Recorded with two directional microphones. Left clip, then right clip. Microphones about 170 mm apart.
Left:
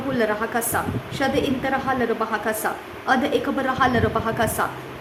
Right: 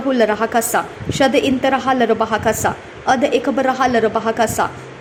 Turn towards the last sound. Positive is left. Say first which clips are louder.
# right 6 dB
turn(degrees=-20)  # may be behind; listen again after turning